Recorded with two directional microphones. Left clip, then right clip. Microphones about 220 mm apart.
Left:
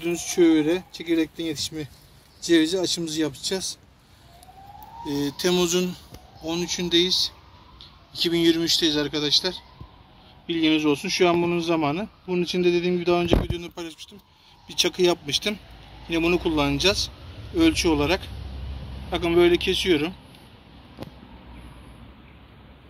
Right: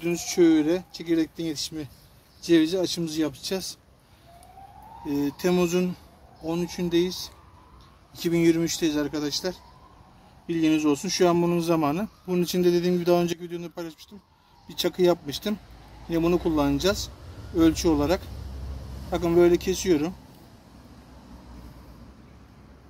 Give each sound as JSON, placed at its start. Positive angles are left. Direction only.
{"t": 0.0, "sound": "speech", "side_deg": -25}
{"t": 5.0, "sound": "speech", "side_deg": -30}